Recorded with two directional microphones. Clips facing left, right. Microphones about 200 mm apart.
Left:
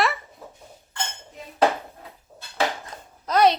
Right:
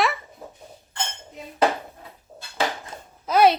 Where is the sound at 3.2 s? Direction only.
5° right (ahead or behind).